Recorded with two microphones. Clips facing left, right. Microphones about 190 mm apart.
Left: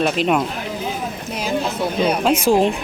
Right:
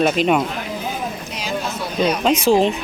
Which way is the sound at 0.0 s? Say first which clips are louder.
Right 1 dB; centre (ahead or behind).